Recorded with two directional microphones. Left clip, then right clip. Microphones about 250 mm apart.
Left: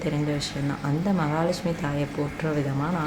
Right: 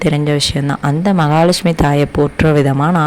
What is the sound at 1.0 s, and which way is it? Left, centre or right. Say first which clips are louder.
Speech: right 14 dB; right.